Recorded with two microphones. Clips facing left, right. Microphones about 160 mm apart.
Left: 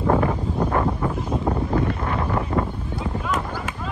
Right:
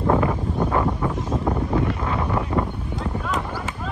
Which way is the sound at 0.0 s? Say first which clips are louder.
Even; centre (ahead or behind).